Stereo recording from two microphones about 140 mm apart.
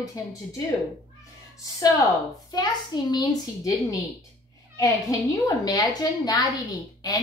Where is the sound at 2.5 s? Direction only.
30° left (ahead or behind).